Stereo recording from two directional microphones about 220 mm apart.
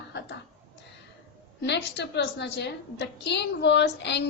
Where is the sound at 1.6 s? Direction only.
50° left (ahead or behind).